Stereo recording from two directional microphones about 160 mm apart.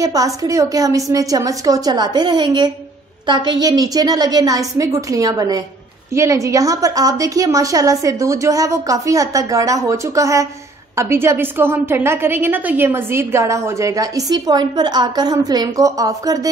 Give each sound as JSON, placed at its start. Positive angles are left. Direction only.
{"t": 0.0, "sound": "a woman's voice", "side_deg": -20}